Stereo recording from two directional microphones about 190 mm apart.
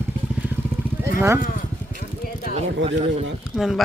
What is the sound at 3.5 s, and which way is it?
Speech, centre (ahead or behind).